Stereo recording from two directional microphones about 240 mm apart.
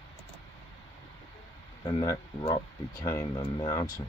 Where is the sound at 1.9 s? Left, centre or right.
Centre.